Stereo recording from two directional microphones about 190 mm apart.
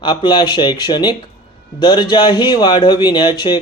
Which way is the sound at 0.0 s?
25° left (ahead or behind).